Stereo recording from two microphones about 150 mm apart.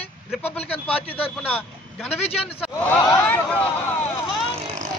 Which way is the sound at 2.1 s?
40° left (ahead or behind).